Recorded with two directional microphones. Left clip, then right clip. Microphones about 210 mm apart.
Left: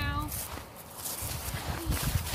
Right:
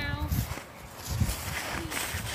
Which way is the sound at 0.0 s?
55° left (ahead or behind).